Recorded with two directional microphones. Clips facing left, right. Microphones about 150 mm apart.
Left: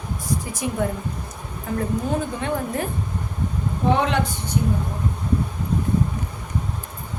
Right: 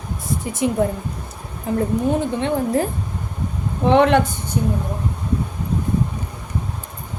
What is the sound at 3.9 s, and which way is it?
Speech, 70° right (ahead or behind).